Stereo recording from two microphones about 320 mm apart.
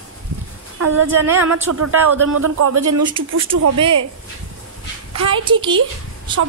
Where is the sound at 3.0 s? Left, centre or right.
Centre.